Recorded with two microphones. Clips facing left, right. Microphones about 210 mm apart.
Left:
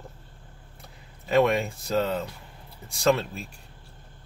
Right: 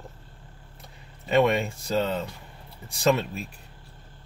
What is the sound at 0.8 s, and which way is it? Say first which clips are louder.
Speech: right 1 dB; centre (ahead or behind).